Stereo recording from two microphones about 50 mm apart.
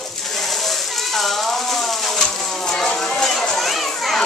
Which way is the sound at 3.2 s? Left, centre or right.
Centre.